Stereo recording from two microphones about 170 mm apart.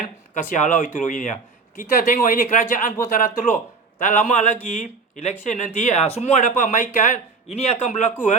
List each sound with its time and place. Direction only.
0.5 s a man's voice: 45° left (ahead or behind)